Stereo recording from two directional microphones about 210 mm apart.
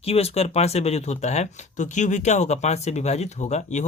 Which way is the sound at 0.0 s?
30° left (ahead or behind).